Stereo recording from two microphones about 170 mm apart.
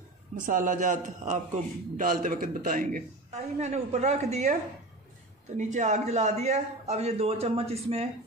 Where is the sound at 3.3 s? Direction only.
40° right (ahead or behind).